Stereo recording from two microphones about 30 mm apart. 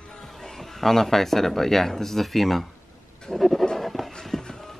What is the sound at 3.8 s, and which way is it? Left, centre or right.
Writing, centre.